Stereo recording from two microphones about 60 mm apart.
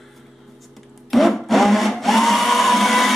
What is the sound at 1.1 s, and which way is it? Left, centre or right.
Blender, centre.